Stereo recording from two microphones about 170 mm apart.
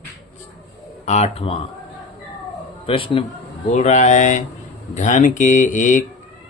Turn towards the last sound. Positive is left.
turn(degrees=50)  # may be behind; listen again after turning